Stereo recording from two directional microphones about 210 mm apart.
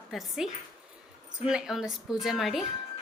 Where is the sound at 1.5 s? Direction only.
Centre (ahead or behind).